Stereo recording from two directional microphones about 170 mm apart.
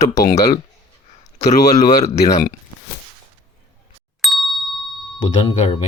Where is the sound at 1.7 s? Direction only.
40° left (ahead or behind).